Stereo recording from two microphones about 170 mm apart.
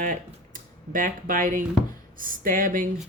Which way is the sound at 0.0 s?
50° right (ahead or behind).